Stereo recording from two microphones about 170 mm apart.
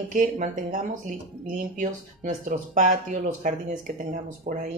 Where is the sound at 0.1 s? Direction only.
50° right (ahead or behind).